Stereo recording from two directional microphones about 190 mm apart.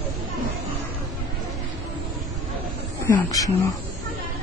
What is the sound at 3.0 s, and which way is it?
Speech, 20° left (ahead or behind).